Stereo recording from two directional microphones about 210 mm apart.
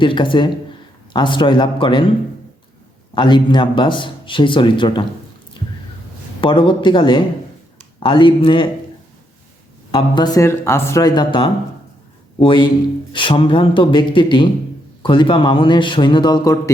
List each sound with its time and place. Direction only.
0.0 s speech: 25° left (ahead or behind)
3.2 s speech: 20° left (ahead or behind)
6.4 s speech: 25° left (ahead or behind)
9.9 s speech: 20° left (ahead or behind)